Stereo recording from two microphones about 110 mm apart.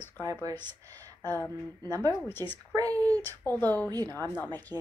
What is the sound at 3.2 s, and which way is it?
Speech, 20° left (ahead or behind).